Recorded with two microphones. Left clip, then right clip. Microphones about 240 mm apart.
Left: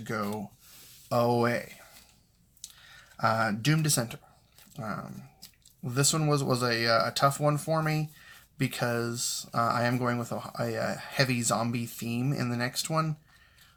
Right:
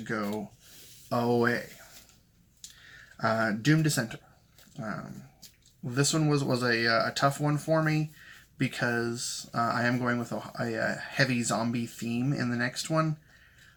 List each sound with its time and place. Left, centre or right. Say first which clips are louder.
1.1 s speech: left 1 dB; left
3.2 s speech: left 1 dB; left
5.9 s speech: even; left